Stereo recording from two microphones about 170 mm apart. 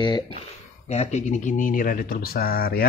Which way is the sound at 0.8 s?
40° left (ahead or behind).